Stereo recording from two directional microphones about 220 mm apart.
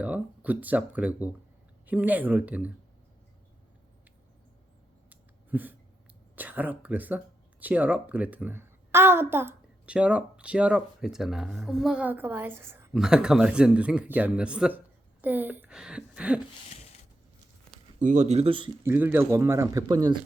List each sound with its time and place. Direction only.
0.0 s a woman's voice: 5° right (ahead or behind)
5.0 s a sound: 5° right (ahead or behind)
6.3 s a woman's voice: 10° right (ahead or behind)
18.0 s speech: 35° right (ahead or behind)
18.8 s a woman's voice: 10° right (ahead or behind)